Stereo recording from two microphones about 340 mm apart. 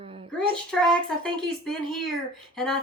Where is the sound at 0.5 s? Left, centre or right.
Centre.